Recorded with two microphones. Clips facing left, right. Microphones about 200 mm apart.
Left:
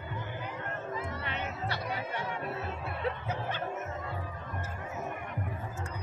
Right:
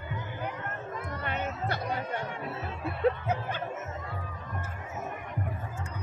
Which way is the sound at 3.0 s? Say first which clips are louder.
Right 9 dB; 50° right (ahead or behind).